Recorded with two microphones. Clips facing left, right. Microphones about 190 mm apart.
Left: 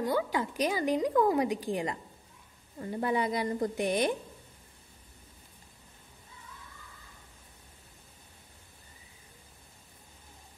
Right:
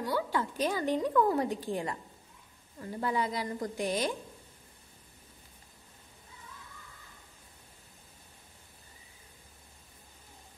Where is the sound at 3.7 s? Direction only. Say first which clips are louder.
Left 1 dB; 60° left (ahead or behind).